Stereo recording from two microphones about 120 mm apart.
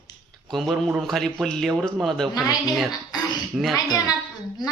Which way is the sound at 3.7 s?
30° left (ahead or behind).